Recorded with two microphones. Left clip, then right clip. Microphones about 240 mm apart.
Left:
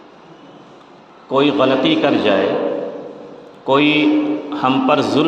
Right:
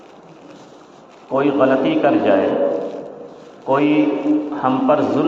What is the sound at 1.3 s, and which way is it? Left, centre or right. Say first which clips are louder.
A man's voice: left 1 dB; left.